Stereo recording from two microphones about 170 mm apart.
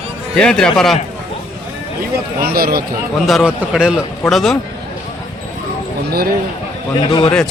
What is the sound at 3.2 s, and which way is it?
A man's voice, centre (ahead or behind).